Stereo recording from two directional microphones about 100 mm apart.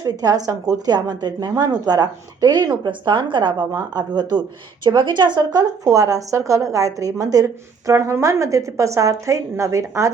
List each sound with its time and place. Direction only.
0.0 s a woman's voice: 40° right (ahead or behind)
5.8 s a woman's voice: 35° right (ahead or behind)